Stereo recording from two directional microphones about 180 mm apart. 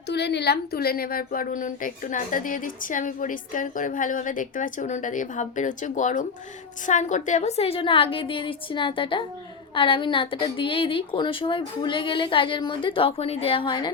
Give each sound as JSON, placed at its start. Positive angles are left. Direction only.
{"t": 0.1, "sound": "a woman's voice", "side_deg": 70}